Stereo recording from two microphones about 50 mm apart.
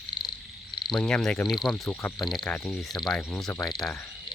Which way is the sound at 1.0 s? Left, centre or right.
Centre.